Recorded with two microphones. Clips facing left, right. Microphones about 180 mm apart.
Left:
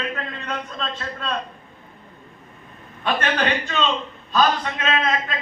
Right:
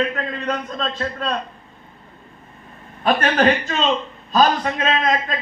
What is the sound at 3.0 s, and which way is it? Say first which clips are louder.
A man's voice: right 6 dB; 40° right (ahead or behind).